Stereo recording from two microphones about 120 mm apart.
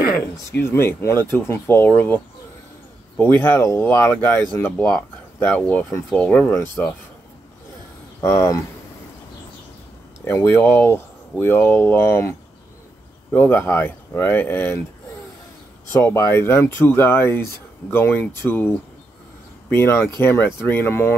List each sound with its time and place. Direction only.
0.7 s speech: 20° left (ahead or behind)
8.2 s speech: 20° left (ahead or behind)
10.2 s speech: 20° left (ahead or behind)
15.9 s speech: 20° left (ahead or behind)